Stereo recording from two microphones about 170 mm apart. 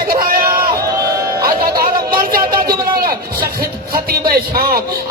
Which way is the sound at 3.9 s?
60° right (ahead or behind).